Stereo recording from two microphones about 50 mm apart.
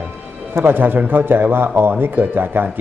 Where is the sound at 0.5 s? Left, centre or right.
Right.